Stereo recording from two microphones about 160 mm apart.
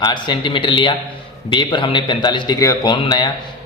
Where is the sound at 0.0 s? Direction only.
30° left (ahead or behind).